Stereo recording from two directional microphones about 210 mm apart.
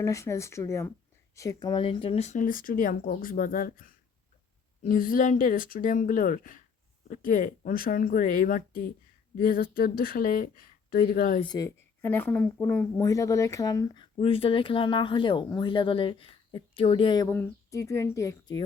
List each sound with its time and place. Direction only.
0.0 s speech: 15° left (ahead or behind); by 11.4 s 40° left (ahead or behind)
11.4 s speech: 15° left (ahead or behind)